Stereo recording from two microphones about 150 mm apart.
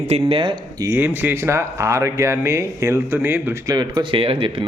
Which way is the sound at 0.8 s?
15° right (ahead or behind).